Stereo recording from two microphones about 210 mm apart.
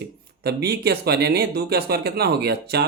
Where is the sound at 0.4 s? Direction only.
50° right (ahead or behind).